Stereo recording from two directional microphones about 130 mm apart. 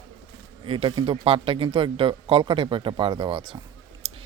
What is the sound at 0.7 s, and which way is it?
Speech, 40° right (ahead or behind).